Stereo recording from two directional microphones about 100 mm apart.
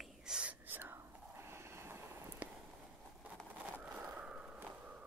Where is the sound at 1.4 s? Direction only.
25° right (ahead or behind).